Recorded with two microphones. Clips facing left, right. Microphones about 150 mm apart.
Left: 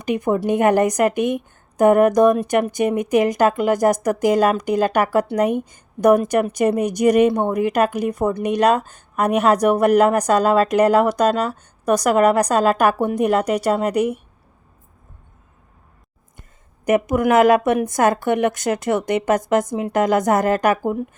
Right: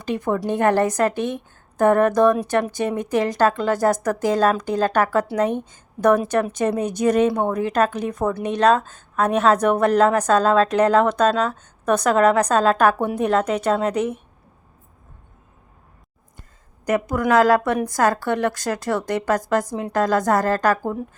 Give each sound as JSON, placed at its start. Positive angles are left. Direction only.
{"t": 0.0, "sound": "a woman's voice", "side_deg": 15}
{"t": 16.8, "sound": "a woman's voice", "side_deg": 20}